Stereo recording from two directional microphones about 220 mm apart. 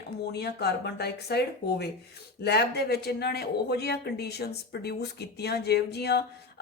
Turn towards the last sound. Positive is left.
turn(degrees=50)  # may be behind; listen again after turning